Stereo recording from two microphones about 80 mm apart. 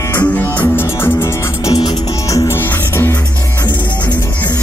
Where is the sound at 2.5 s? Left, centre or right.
Left.